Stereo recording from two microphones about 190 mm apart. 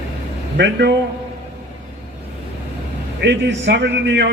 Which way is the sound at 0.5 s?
65° right (ahead or behind).